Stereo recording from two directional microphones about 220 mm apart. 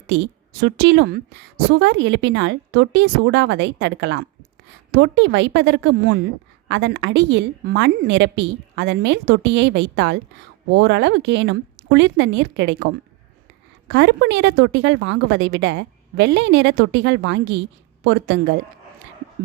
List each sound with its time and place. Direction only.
0.1 s a woman's voice: 50° right (ahead or behind)